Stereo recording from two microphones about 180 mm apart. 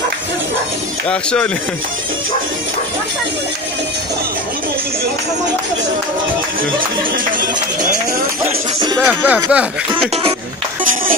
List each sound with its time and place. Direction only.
1.0 s speech: 5° left (ahead or behind)
8.5 s speech: 25° right (ahead or behind)
9.0 s speech: 10° right (ahead or behind)